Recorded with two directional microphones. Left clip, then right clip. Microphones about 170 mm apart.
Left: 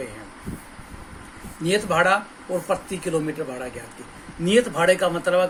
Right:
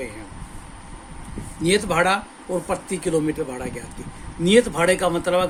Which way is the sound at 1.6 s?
45° right (ahead or behind).